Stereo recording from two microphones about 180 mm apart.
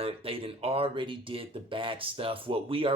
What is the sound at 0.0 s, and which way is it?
Speech, 30° right (ahead or behind).